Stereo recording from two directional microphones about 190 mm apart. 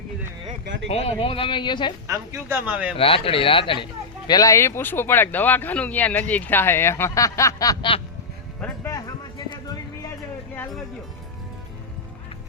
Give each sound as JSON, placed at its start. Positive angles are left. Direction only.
{"t": 0.6, "sound": "speech", "side_deg": -70}
{"t": 0.9, "sound": "speech", "side_deg": 30}
{"t": 2.0, "sound": "speech", "side_deg": -10}
{"t": 2.9, "sound": "speech", "side_deg": 30}
{"t": 8.6, "sound": "music", "side_deg": 10}